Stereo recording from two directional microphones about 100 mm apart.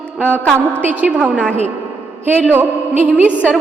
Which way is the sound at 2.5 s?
15° right (ahead or behind).